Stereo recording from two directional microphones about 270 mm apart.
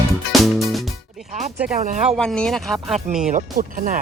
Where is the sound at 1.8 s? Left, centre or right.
Right.